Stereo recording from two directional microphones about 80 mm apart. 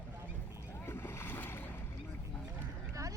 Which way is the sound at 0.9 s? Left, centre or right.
Left.